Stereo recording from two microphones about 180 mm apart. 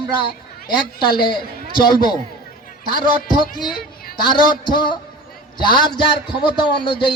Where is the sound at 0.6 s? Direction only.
25° left (ahead or behind).